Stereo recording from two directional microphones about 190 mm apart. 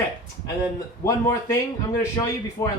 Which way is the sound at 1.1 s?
15° left (ahead or behind).